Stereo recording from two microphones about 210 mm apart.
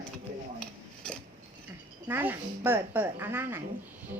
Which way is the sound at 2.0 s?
10° right (ahead or behind).